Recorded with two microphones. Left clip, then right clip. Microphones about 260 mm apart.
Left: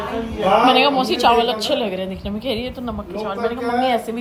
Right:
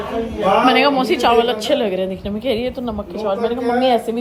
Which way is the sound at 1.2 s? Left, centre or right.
Left.